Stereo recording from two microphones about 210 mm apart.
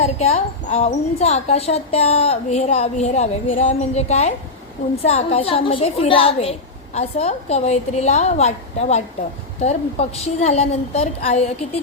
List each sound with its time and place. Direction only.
0.0 s a woman's voice: 30° left (ahead or behind)